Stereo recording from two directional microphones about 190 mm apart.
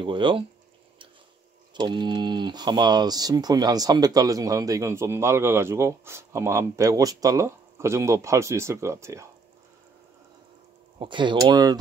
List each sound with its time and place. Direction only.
0.0 s speech: 25° right (ahead or behind)
1.7 s speech: 25° right (ahead or behind)
11.0 s speech: 25° right (ahead or behind)